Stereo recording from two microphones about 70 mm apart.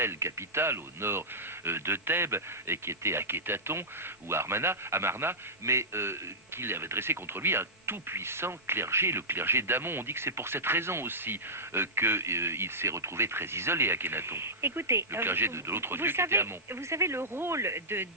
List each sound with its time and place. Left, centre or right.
0.0 s speech: right